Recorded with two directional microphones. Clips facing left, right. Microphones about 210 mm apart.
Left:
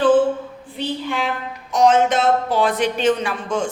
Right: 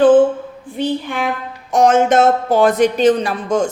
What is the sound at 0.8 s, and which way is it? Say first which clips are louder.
Speech: right 4 dB; 50° right (ahead or behind).